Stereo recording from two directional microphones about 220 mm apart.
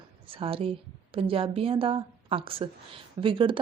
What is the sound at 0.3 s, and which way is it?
A woman's voice, 25° right (ahead or behind).